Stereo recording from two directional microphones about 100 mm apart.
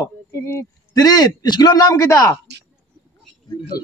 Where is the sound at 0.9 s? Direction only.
40° left (ahead or behind).